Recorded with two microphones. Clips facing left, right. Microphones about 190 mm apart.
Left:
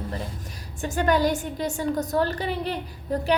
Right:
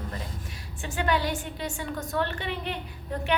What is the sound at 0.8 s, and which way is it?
A woman's voice, 45° left (ahead or behind).